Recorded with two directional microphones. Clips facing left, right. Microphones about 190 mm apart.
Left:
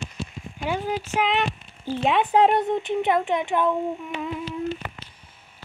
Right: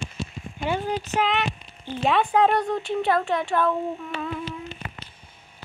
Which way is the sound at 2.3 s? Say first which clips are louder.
Left 2 dB; 20° left (ahead or behind).